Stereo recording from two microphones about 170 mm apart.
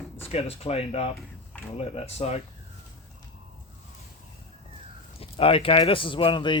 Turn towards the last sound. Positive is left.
turn(degrees=30)  # may be behind; listen again after turning